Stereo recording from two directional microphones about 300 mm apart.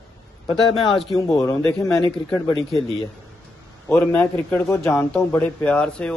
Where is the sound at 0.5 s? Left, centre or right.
Centre.